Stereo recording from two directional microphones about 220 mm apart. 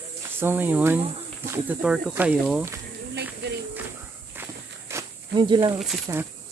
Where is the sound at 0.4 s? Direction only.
10° right (ahead or behind).